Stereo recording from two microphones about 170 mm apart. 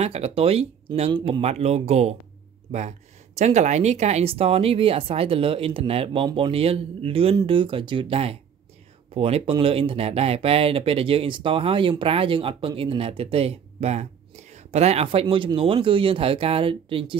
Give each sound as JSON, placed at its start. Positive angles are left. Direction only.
{"t": 0.0, "sound": "speech", "side_deg": -35}
{"t": 3.3, "sound": "speech", "side_deg": -40}